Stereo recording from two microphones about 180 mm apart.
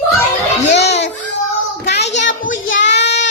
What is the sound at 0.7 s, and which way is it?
Children playing, 70° left (ahead or behind).